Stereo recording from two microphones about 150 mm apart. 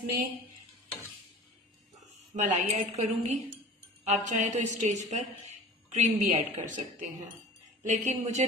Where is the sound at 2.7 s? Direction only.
50° right (ahead or behind).